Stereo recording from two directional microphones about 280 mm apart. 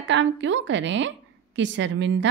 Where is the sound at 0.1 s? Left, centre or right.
Right.